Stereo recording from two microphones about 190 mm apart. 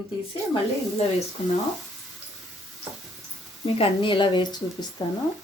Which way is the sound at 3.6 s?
30° left (ahead or behind).